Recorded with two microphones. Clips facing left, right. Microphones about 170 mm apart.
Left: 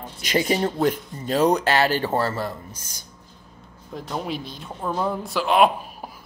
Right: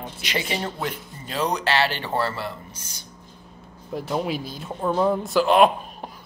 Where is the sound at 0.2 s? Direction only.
45° left (ahead or behind).